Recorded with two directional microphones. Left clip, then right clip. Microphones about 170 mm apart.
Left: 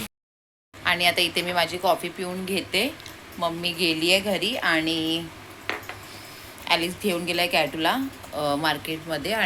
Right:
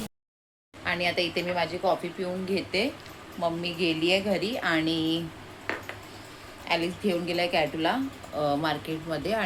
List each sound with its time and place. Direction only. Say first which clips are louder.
0.9 s a woman's voice: left 6 dB; 5° right (ahead or behind)
5.7 s a sound: left 2 dB; 20° right (ahead or behind)
6.7 s a woman's voice: left 4 dB; centre (ahead or behind)